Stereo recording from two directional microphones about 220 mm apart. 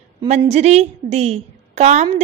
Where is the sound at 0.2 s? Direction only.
25° right (ahead or behind).